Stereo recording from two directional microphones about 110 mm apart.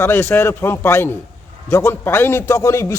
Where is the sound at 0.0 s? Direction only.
20° left (ahead or behind).